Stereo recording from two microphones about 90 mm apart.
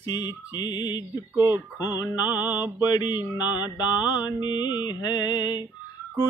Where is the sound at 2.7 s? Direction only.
50° left (ahead or behind).